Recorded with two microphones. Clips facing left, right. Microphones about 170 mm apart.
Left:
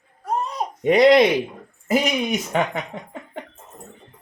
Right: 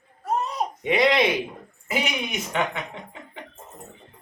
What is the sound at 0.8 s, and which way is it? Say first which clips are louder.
Speech: left 7 dB; 40° left (ahead or behind).